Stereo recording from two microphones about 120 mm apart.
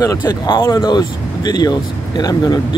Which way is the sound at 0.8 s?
35° left (ahead or behind).